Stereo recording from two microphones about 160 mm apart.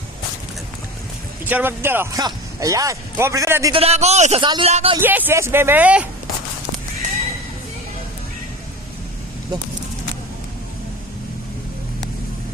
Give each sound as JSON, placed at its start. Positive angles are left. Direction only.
{"t": 1.5, "sound": "speech", "side_deg": -10}
{"t": 3.7, "sound": "a man's voice", "side_deg": -40}
{"t": 4.4, "sound": "speech", "side_deg": -30}
{"t": 4.7, "sound": "a man's voice", "side_deg": -40}
{"t": 4.9, "sound": "speech", "side_deg": -10}